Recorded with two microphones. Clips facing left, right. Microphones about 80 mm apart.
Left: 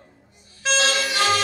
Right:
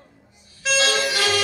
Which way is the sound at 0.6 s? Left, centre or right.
Left.